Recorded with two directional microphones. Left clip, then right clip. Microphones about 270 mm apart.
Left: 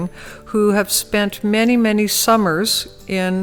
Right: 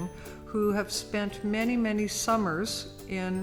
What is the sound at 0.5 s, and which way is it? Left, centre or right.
Speech, left.